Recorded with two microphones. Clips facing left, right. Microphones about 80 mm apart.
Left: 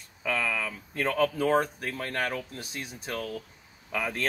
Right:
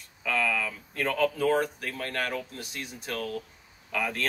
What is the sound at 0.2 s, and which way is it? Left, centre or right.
Speech, centre.